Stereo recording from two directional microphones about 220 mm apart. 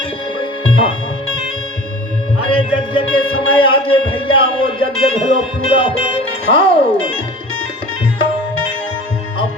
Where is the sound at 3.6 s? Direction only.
25° left (ahead or behind).